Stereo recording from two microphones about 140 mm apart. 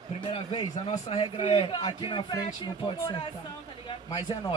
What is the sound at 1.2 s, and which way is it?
A man's voice, 40° left (ahead or behind).